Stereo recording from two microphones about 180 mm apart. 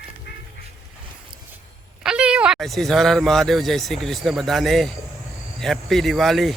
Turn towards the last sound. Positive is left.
turn(degrees=0)  # may be behind; listen again after turning